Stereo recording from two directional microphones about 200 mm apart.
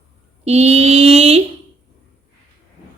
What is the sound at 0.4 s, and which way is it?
Mantra, 30° right (ahead or behind).